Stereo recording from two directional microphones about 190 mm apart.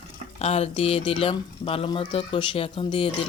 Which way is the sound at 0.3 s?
35° left (ahead or behind).